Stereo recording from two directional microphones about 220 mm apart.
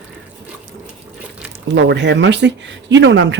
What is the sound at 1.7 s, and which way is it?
Speech, 50° right (ahead or behind).